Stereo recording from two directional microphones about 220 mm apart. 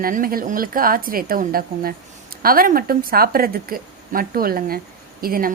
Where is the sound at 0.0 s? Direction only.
40° right (ahead or behind).